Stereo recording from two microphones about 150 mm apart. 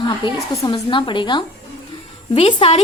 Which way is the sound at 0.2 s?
35° left (ahead or behind).